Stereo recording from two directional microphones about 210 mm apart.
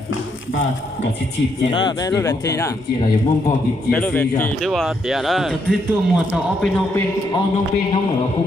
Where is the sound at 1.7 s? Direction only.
20° left (ahead or behind); by 6.7 s 5° right (ahead or behind).